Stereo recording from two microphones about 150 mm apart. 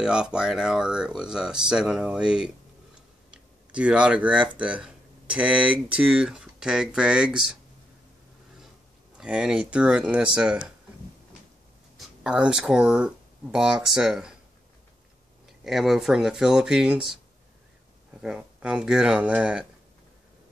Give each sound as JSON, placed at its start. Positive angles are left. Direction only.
{"t": 0.0, "sound": "speech", "side_deg": -5}
{"t": 9.2, "sound": "speech", "side_deg": -5}
{"t": 12.0, "sound": "speech", "side_deg": -5}
{"t": 15.4, "sound": "speech", "side_deg": 0}
{"t": 18.2, "sound": "speech", "side_deg": -5}